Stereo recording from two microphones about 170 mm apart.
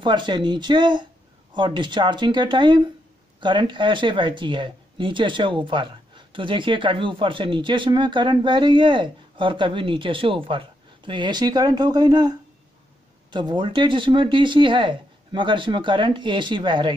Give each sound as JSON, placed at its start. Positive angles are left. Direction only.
{"t": 0.0, "sound": "speech", "side_deg": -25}